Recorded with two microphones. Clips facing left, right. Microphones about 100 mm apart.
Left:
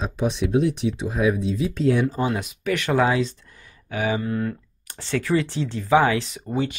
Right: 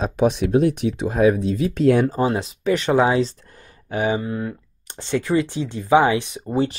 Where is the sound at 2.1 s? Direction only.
35° right (ahead or behind); by 6.5 s 20° right (ahead or behind).